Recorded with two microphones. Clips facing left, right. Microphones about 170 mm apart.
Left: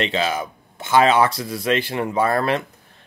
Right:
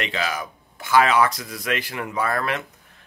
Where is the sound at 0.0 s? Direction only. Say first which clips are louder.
Left 5 dB; 25° left (ahead or behind).